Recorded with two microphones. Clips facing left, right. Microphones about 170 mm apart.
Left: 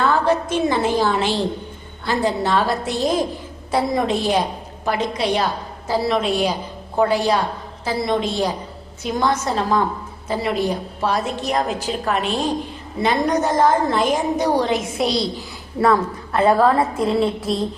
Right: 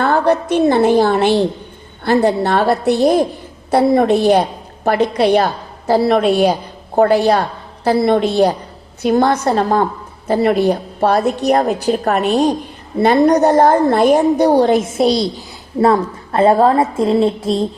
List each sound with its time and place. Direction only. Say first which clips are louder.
0.0 s a woman's voice: right 4 dB; 65° right (ahead or behind)
12.0 s a woman's voice: right 6 dB; 50° right (ahead or behind)
13.1 s a woman's voice: right 8 dB; 35° right (ahead or behind)
13.4 s a woman's voice: right 6 dB; 65° right (ahead or behind)
14.6 s a woman's voice: right 8 dB; 50° right (ahead or behind)
15.8 s a woman's voice: right 4 dB; 30° right (ahead or behind)